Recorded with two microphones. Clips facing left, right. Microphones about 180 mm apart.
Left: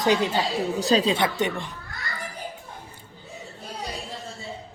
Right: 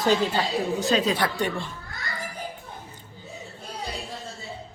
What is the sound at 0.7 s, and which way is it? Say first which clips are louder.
A woman's voice: left 3 dB; 35° left (ahead or behind).